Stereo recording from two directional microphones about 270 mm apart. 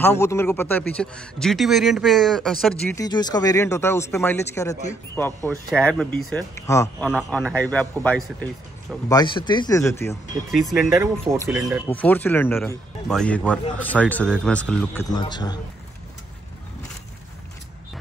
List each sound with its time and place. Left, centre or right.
0.0 s speech: centre
2.9 s speech: centre
9.1 s speech: centre
11.8 s speech: centre